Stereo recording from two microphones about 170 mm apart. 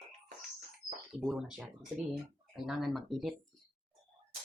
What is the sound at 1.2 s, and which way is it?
Speech, centre (ahead or behind).